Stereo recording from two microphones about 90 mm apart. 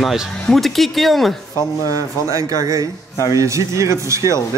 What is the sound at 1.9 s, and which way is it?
Speech, 35° right (ahead or behind).